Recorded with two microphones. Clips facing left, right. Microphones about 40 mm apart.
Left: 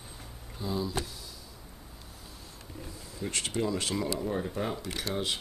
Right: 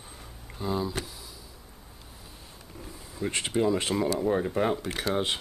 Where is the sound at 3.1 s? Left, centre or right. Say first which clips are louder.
Right 5 dB; right.